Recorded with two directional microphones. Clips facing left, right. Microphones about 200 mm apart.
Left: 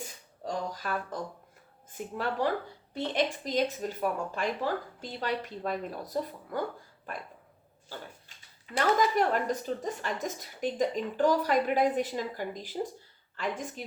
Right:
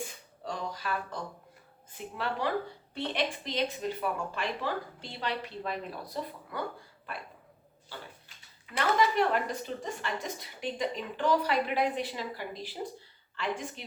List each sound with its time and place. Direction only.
0.4 s a sound: 45° left (ahead or behind)
1.9 s a woman's voice: 45° left (ahead or behind)
8.6 s a woman's voice: 45° left (ahead or behind)